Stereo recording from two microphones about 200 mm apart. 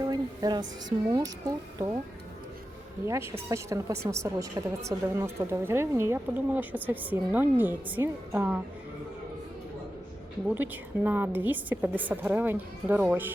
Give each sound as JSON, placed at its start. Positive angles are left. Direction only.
{"t": 0.0, "sound": "music", "side_deg": -20}
{"t": 0.9, "sound": "a woman's voice", "side_deg": -20}
{"t": 3.1, "sound": "a woman's voice", "side_deg": -15}
{"t": 10.5, "sound": "a woman's voice", "side_deg": -10}